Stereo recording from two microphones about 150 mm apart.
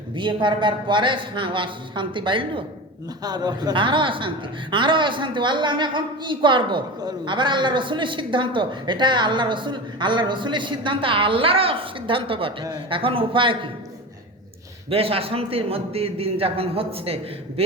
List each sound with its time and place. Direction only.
0.2 s a woman's voice: 35° right (ahead or behind)
14.8 s a woman's voice: 40° right (ahead or behind)